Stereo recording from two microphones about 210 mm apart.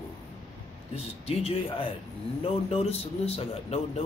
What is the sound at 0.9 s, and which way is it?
Speech, 30° left (ahead or behind).